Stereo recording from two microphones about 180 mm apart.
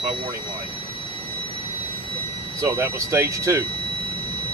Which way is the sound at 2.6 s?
15° right (ahead or behind).